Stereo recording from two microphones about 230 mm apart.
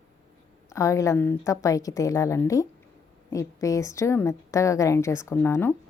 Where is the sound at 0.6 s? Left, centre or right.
Centre.